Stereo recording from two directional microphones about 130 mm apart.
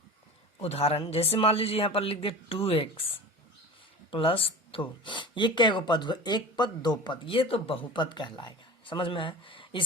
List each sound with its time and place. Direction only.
0.6 s speech: 50° left (ahead or behind)
4.1 s speech: 45° left (ahead or behind)